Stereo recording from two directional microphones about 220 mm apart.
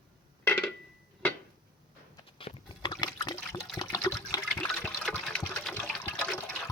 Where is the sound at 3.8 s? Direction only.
15° left (ahead or behind).